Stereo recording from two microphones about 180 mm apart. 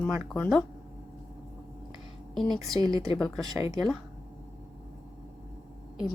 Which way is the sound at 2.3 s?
Centre (ahead or behind).